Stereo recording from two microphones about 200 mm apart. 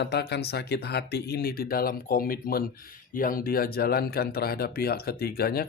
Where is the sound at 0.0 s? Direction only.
55° left (ahead or behind).